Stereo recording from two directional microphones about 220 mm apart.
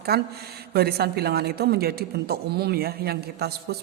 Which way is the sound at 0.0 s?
45° right (ahead or behind).